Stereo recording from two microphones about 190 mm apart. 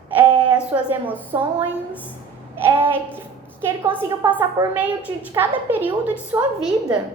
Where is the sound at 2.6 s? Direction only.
10° right (ahead or behind).